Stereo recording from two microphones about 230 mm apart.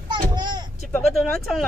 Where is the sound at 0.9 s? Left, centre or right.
Centre.